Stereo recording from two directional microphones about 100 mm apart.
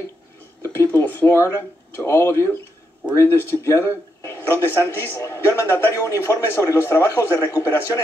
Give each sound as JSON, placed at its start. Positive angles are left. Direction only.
{"t": 0.6, "sound": "a man's voice", "side_deg": 25}